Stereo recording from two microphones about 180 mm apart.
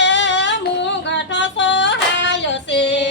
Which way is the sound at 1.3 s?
90° left.